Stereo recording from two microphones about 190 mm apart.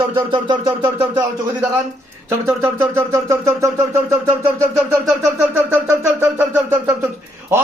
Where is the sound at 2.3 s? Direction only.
15° right (ahead or behind).